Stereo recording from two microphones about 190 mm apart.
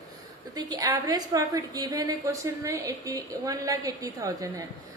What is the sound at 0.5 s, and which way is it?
A woman's voice, 20° right (ahead or behind).